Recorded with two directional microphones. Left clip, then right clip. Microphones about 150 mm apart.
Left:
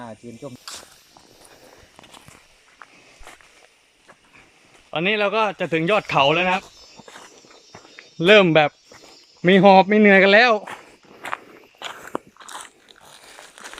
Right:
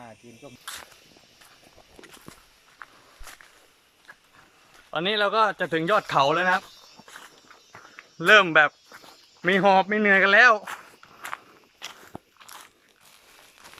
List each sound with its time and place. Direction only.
0.0 s speech: 30° left (ahead or behind)
4.9 s speech: 10° left (ahead or behind)
7.0 s walk: 25° left (ahead or behind)
7.9 s a sound: 30° left (ahead or behind)
12.5 s biting: 25° left (ahead or behind)
13.6 s a sound: 45° left (ahead or behind)